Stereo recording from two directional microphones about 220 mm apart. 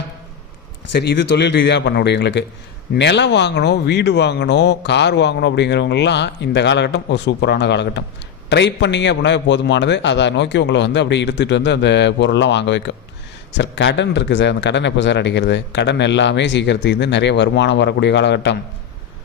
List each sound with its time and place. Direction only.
0.9 s speech: 50° left (ahead or behind)